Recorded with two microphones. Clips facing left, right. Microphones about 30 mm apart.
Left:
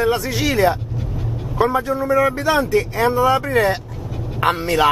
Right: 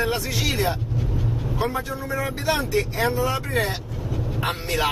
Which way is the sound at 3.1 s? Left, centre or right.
Left.